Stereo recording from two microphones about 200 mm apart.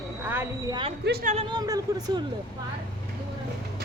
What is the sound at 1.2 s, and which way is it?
Speech, 30° right (ahead or behind).